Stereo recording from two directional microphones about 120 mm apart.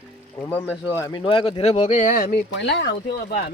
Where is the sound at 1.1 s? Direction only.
45° left (ahead or behind).